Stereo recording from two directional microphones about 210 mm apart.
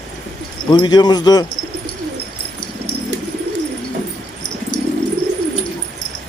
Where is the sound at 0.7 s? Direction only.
20° left (ahead or behind).